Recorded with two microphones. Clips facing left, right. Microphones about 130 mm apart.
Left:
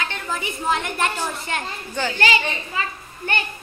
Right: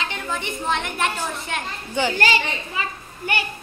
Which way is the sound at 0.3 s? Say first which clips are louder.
Left 2 dB; 5° left (ahead or behind).